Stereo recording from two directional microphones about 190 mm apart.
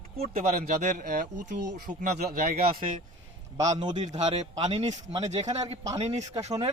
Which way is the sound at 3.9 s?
35° right (ahead or behind).